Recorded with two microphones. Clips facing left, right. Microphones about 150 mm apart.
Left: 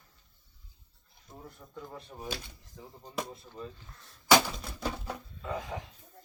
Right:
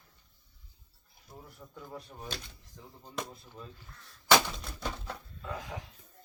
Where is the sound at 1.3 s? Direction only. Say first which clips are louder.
Even; 25° left (ahead or behind).